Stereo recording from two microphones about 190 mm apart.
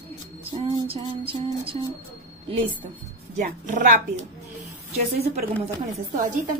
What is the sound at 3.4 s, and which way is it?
Speech, 40° right (ahead or behind).